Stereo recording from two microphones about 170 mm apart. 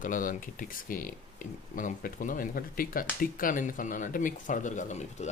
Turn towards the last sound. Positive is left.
turn(degrees=45)  # may be behind; listen again after turning